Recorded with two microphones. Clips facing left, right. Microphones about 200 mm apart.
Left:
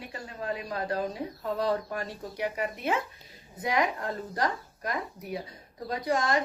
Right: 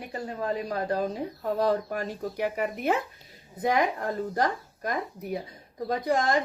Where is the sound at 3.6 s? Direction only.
55° right (ahead or behind).